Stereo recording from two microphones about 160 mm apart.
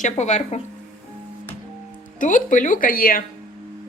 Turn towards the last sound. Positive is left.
turn(degrees=65)  # may be behind; listen again after turning